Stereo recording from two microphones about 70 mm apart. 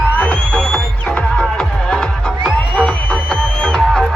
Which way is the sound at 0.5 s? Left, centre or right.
Centre.